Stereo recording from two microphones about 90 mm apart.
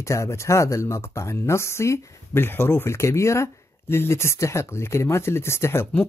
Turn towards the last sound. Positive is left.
turn(degrees=30)  # may be behind; listen again after turning